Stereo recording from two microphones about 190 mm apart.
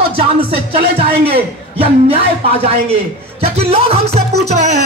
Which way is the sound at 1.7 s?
30° right (ahead or behind).